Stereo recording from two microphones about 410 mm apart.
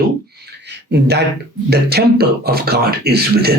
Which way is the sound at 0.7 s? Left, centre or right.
Right.